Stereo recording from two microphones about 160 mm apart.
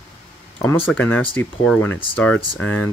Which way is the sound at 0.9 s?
10° left (ahead or behind).